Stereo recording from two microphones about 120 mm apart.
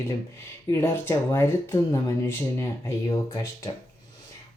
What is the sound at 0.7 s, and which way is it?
Speech, 20° left (ahead or behind).